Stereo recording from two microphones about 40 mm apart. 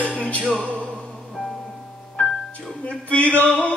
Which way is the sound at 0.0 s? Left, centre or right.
Left.